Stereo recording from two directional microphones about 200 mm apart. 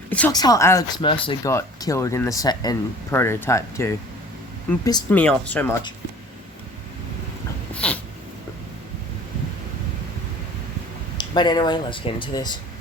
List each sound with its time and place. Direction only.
0.1 s speech: 5° left (ahead or behind)
0.3 s speech: 20° left (ahead or behind)
1.5 s speech: 15° left (ahead or behind)
5.1 s speech: 5° left (ahead or behind)
7.7 s dog: 5° left (ahead or behind)
11.2 s speech: 20° left (ahead or behind)